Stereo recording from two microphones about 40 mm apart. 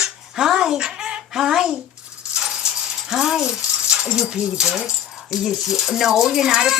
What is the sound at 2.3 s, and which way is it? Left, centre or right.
Dog, centre.